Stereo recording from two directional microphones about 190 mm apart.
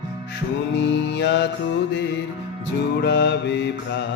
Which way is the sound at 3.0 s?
60° left (ahead or behind).